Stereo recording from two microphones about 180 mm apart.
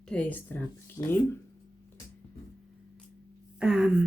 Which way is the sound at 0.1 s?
10° left (ahead or behind).